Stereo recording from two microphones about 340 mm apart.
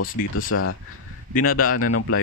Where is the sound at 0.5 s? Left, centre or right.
Left.